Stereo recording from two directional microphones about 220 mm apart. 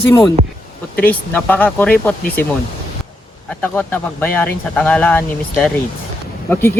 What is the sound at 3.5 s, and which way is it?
Speech, 5° left (ahead or behind).